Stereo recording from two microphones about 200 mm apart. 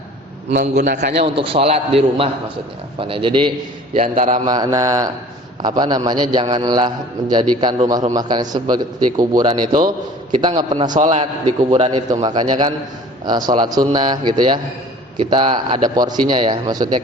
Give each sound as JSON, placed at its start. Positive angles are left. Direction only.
{"t": 1.2, "sound": "a man's voice", "side_deg": -25}
{"t": 3.9, "sound": "a man's voice", "side_deg": -40}
{"t": 4.4, "sound": "mantra", "side_deg": -20}
{"t": 5.6, "sound": "a man's voice", "side_deg": -20}
{"t": 10.9, "sound": "a man's voice", "side_deg": -35}